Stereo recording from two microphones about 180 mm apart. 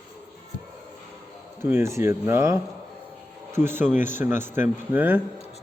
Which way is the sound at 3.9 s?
45° left (ahead or behind).